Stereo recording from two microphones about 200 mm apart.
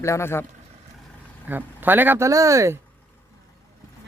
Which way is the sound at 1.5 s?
10° right (ahead or behind).